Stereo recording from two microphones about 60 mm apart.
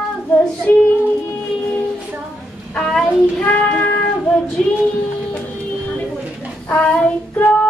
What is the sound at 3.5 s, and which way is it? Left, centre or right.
Child singing, left.